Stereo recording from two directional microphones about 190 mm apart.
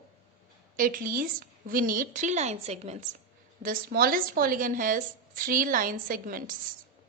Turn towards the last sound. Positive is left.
turn(degrees=-50)  # may be behind; listen again after turning